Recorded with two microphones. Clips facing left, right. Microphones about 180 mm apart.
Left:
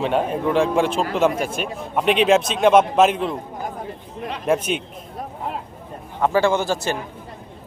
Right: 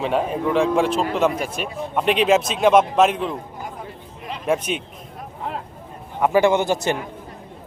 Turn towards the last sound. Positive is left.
turn(degrees=-20)  # may be behind; listen again after turning